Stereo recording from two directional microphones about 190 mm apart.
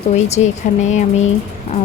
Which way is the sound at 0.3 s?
35° left (ahead or behind).